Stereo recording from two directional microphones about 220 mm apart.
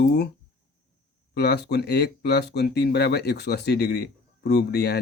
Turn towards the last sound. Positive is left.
turn(degrees=45)  # may be behind; listen again after turning